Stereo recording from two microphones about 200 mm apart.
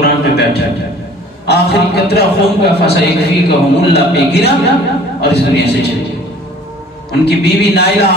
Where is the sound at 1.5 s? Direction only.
55° left (ahead or behind).